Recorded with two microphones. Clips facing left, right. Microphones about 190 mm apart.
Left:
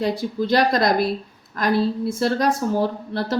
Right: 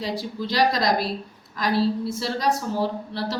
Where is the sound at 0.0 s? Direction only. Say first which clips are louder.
Left 6 dB; 55° left (ahead or behind).